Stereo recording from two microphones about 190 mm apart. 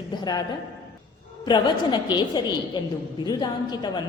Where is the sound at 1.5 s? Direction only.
25° left (ahead or behind).